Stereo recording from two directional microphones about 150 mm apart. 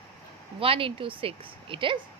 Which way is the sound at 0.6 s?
35° right (ahead or behind).